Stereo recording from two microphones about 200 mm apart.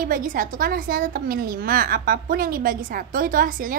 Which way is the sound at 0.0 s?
45° right (ahead or behind).